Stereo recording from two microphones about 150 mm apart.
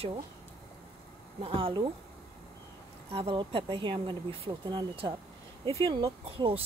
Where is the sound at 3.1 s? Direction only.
35° right (ahead or behind).